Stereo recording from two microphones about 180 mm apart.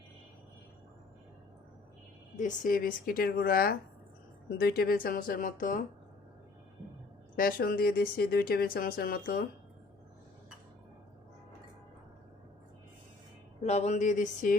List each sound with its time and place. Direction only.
2.3 s speech: 50° left (ahead or behind)
7.3 s speech: 55° left (ahead or behind)
13.6 s speech: 40° left (ahead or behind)